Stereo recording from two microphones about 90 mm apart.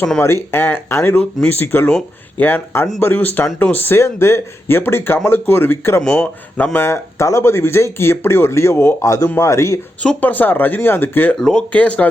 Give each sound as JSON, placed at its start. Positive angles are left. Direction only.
{"t": 0.2, "sound": "speech", "side_deg": 30}
{"t": 1.2, "sound": "speech", "side_deg": 20}
{"t": 6.0, "sound": "speech", "side_deg": 10}
{"t": 6.7, "sound": "speech", "side_deg": 30}
{"t": 10.0, "sound": "speech", "side_deg": 15}
{"t": 11.3, "sound": "speech", "side_deg": 5}